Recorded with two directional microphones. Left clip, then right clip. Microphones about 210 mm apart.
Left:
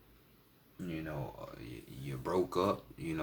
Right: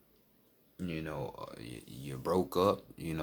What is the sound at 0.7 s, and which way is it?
Speech, 50° right (ahead or behind).